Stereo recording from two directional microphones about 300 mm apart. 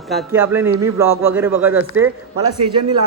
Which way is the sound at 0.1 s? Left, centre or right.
Centre.